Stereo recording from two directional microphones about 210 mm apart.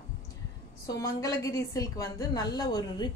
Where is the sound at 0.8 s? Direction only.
15° left (ahead or behind).